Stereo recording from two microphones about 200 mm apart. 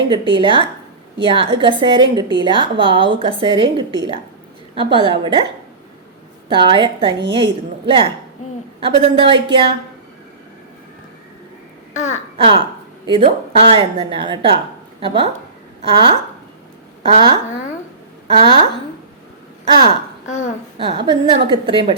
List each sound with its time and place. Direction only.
0.1 s a woman's voice: 25° right (ahead or behind)
6.5 s a woman's voice: 25° right (ahead or behind)
11.9 s speech: 35° left (ahead or behind)
12.4 s a woman's voice: 25° right (ahead or behind)
18.3 s a woman's voice: 25° right (ahead or behind)
20.2 s speech: 35° left (ahead or behind)
20.7 s a woman's voice: 25° right (ahead or behind)